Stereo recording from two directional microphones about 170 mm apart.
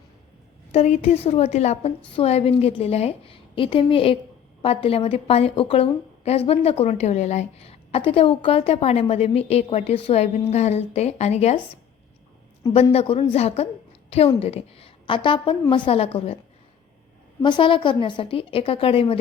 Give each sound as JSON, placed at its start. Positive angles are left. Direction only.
{"t": 0.7, "sound": "a woman's voice", "side_deg": 40}
{"t": 12.7, "sound": "a woman's voice", "side_deg": 35}
{"t": 17.4, "sound": "a woman's voice", "side_deg": 30}